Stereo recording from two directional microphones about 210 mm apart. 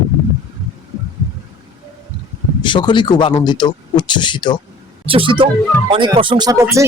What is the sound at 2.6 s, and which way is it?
Speech, 20° left (ahead or behind).